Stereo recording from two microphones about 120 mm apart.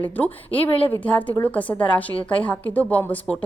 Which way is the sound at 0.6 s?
50° left (ahead or behind).